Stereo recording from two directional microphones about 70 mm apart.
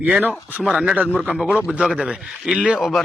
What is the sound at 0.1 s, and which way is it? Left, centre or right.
Speech, right.